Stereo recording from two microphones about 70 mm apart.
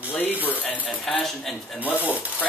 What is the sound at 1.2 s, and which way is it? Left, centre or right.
Speech, centre.